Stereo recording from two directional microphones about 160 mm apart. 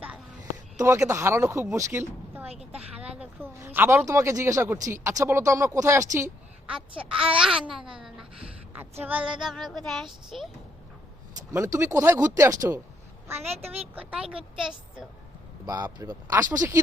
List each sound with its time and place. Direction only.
0.8 s speech: 20° right (ahead or behind)
6.7 s a woman's voice: 5° right (ahead or behind)
7.1 s babbling: 5° right (ahead or behind)
8.0 s a sound: 5° right (ahead or behind)
11.5 s a woman's voice: 15° right (ahead or behind)
13.5 s speech: 40° right (ahead or behind)
13.7 s a woman's voice: 10° right (ahead or behind)
15.6 s speech: 25° right (ahead or behind)